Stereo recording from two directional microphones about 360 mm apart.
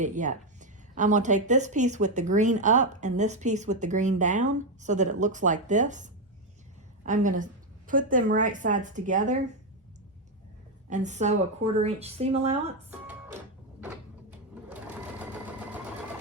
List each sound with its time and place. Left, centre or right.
0.0 s a woman's voice: right
10.8 s a woman's voice: centre
13.8 s sewing machine: centre